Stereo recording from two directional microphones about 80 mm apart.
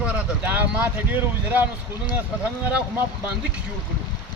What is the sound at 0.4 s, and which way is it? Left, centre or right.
A man's voice, right.